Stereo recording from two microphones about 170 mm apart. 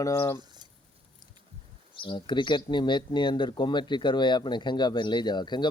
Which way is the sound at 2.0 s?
25° left (ahead or behind).